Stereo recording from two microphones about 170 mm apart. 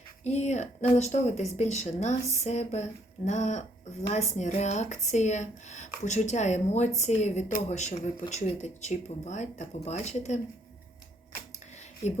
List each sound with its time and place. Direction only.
0.3 s speech: 40° left (ahead or behind)